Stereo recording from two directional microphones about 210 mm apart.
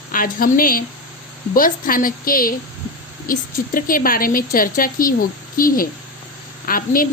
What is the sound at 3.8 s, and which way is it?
A woman's voice, 40° left (ahead or behind).